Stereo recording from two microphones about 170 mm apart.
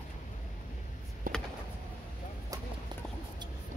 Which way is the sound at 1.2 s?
55° right (ahead or behind).